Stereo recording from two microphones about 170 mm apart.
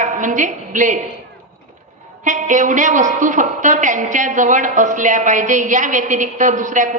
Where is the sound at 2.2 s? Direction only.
50° right (ahead or behind).